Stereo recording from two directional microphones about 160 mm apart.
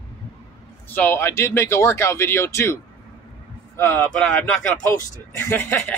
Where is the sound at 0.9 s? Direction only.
10° left (ahead or behind).